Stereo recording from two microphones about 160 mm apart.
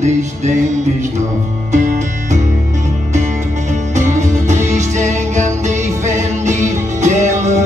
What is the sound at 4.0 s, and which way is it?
Music, 45° right (ahead or behind).